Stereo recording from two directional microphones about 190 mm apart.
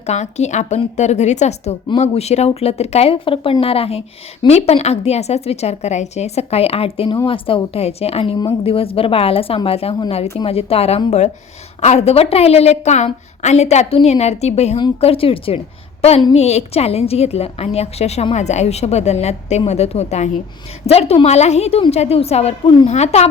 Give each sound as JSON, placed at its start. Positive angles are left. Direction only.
{"t": 0.0, "sound": "a woman's voice", "side_deg": 35}
{"t": 22.9, "sound": "a woman's voice", "side_deg": 35}